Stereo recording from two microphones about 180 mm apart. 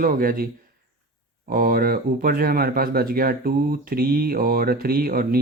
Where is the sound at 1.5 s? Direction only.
50° right (ahead or behind).